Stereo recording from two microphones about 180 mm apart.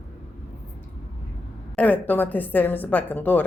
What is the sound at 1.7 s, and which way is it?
A woman's voice, 10° left (ahead or behind).